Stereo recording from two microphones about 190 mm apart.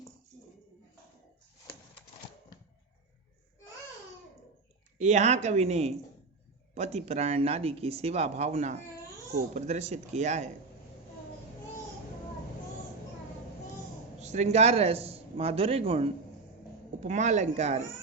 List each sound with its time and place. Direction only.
4.9 s a man's voice: 35° right (ahead or behind)
14.2 s a man's voice: 35° right (ahead or behind)